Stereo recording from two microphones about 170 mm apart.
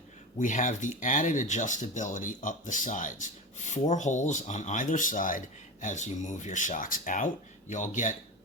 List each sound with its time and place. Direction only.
0.3 s speech: 50° left (ahead or behind)